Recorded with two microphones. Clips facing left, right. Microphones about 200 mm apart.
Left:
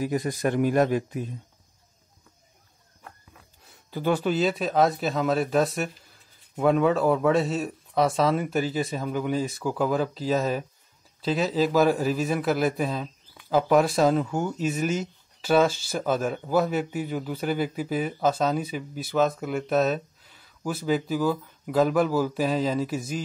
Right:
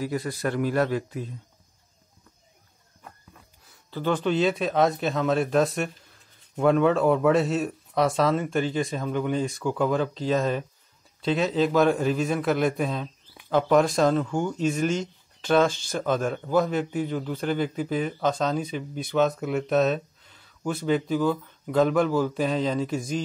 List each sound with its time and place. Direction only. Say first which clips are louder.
0.0 s a man's voice: left 2 dB; 15° left (ahead or behind)
3.9 s speech: even; 10° left (ahead or behind)